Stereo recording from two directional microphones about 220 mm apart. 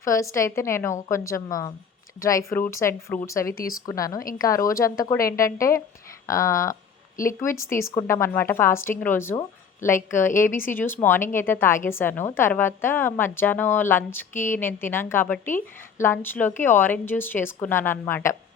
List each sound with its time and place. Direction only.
0.0 s a woman's voice: 15° left (ahead or behind)
3.5 s speech: 40° left (ahead or behind)
3.8 s a woman's voice: 15° left (ahead or behind)